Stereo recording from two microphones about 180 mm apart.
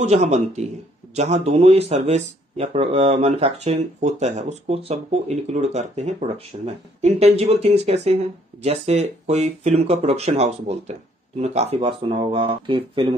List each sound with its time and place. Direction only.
0.0 s speech: 35° right (ahead or behind)